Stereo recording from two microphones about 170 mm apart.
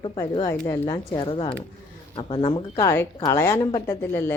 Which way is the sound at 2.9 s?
15° left (ahead or behind).